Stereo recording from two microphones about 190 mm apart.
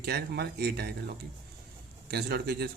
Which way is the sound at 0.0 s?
55° right (ahead or behind).